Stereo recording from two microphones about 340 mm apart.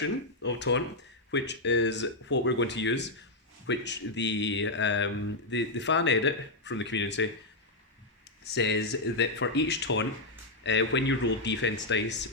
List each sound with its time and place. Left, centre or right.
0.0 s speech: left
8.5 s speech: left